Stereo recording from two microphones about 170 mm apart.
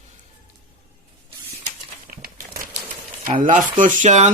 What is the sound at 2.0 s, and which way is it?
Crumpling, 55° right (ahead or behind).